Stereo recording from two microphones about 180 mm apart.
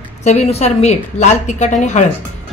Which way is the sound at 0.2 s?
40° left (ahead or behind).